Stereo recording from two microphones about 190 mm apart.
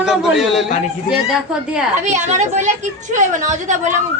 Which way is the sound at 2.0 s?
40° right (ahead or behind).